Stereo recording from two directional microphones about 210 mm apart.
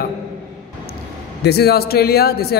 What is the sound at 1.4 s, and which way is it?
Speech, 50° left (ahead or behind).